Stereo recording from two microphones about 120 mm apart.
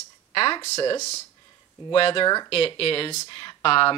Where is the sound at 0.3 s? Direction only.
50° left (ahead or behind).